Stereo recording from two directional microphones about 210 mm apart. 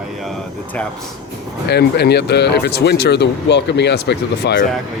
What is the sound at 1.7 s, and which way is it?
Speech, 50° left (ahead or behind).